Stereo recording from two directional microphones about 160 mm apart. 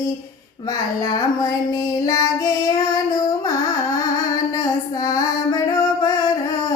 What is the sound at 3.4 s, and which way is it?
Carnatic music, 20° left (ahead or behind).